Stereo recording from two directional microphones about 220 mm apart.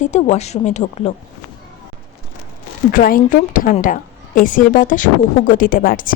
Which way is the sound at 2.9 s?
40° left (ahead or behind).